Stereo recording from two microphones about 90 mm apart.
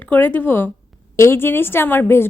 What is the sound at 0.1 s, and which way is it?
A woman's voice, 25° left (ahead or behind).